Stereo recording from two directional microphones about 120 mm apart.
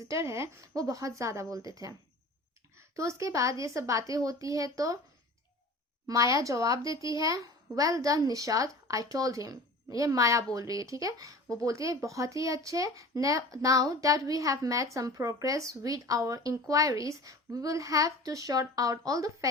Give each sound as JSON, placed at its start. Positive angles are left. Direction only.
{"t": 0.0, "sound": "a child's voice", "side_deg": -25}
{"t": 6.1, "sound": "a child's voice", "side_deg": -25}